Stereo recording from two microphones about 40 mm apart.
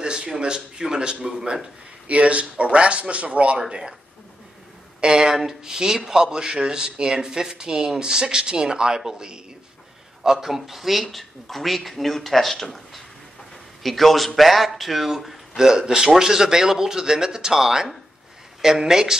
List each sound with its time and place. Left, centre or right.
0.0 s a sound: right
0.4 s speech: centre
2.0 s speech: right
5.0 s speech: centre